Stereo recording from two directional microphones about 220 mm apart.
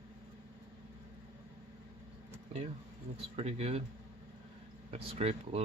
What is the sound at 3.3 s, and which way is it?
Speech, 30° right (ahead or behind).